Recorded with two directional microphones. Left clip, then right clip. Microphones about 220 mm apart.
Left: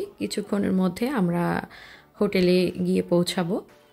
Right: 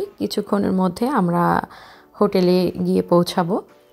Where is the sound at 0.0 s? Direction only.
15° right (ahead or behind).